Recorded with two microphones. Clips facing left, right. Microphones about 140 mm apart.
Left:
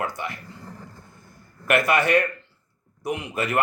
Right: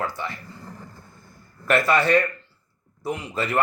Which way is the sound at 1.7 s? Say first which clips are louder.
Right 1 dB; 20° left (ahead or behind).